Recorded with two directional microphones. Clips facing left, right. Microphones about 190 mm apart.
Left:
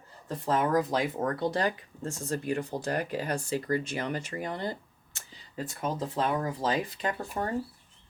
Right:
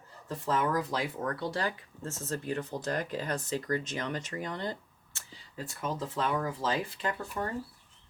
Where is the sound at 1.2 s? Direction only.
45° left (ahead or behind).